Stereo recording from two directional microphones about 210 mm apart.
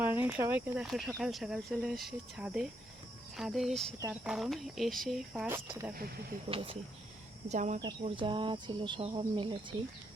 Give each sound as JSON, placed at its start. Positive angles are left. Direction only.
{"t": 0.1, "sound": "speech", "side_deg": -10}
{"t": 6.5, "sound": "speech", "side_deg": -25}
{"t": 7.8, "sound": "speech", "side_deg": -20}